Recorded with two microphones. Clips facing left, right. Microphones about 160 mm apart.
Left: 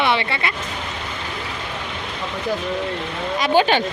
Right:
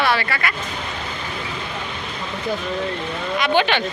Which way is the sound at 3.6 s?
40° left (ahead or behind).